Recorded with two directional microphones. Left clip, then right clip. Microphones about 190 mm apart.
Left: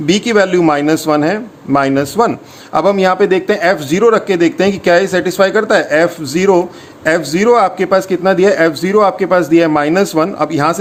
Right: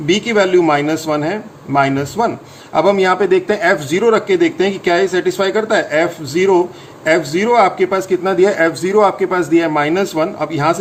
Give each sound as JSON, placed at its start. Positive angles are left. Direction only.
{"t": 0.0, "sound": "speech", "side_deg": 50}